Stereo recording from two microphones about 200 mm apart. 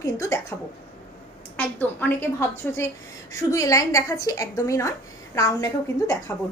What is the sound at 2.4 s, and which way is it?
A woman's voice, 10° left (ahead or behind).